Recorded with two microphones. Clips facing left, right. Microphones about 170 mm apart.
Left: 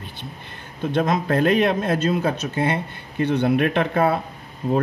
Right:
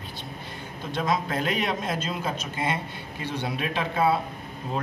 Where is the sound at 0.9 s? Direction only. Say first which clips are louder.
Left 6 dB; 55° left (ahead or behind).